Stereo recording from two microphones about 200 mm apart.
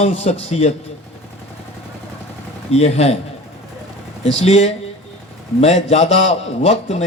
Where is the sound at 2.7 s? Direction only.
30° left (ahead or behind).